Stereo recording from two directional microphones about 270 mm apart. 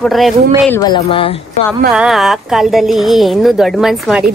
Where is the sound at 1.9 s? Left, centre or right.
Centre.